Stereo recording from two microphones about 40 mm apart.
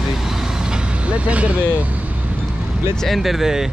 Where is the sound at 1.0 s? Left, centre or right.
Right.